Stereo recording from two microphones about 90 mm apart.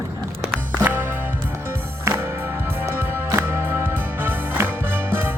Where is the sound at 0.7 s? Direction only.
20° right (ahead or behind).